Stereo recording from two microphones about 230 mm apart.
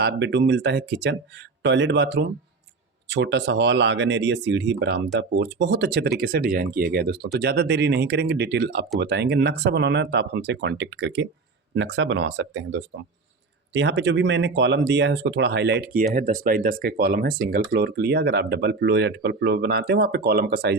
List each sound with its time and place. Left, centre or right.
0.0 s speech: right